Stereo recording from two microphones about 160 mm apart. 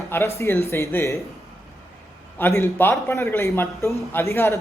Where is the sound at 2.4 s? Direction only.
15° left (ahead or behind).